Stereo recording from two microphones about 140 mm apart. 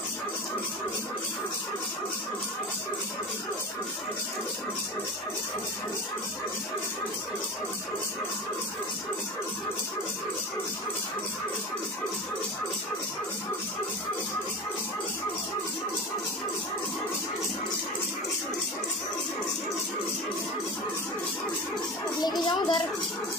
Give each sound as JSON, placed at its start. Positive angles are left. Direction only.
{"t": 22.2, "sound": "speech", "side_deg": 30}